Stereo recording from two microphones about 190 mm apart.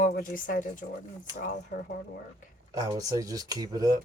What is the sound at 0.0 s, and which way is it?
Speech, 45° left (ahead or behind).